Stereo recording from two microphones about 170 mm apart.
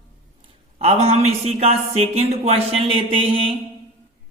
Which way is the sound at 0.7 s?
35° right (ahead or behind).